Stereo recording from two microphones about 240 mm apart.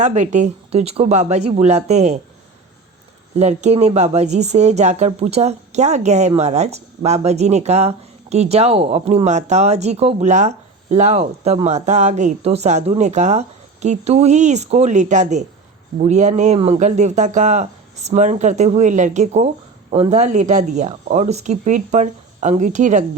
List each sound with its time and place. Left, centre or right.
0.0 s speech: right
3.3 s speech: right